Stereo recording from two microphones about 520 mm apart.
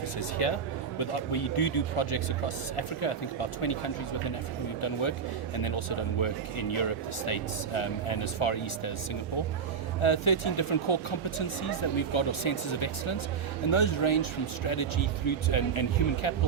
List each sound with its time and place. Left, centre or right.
0.4 s a man's voice: left
10.0 s speech: left